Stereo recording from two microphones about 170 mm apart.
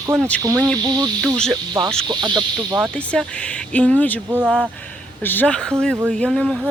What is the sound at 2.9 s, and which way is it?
Speech, 5° left (ahead or behind).